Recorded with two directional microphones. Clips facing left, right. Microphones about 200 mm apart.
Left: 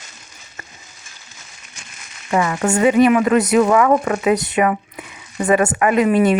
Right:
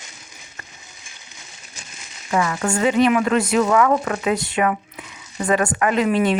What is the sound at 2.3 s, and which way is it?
Speech, 20° left (ahead or behind).